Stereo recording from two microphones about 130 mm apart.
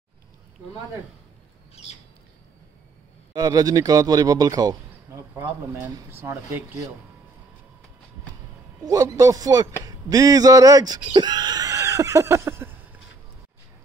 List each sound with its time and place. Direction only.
3.3 s speech: 30° right (ahead or behind)
8.8 s speech: 25° right (ahead or behind)